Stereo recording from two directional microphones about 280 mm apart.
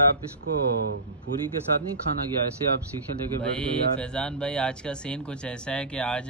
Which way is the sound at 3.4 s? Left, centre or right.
Centre.